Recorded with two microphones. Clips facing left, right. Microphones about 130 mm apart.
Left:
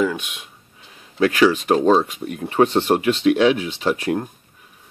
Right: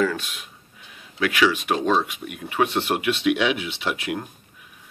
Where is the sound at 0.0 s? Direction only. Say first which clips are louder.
Left 2 dB; 15° left (ahead or behind).